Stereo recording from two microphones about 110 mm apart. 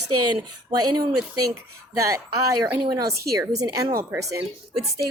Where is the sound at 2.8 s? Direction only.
30° right (ahead or behind).